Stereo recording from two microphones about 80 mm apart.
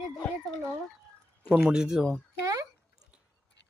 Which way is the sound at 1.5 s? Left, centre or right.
Centre.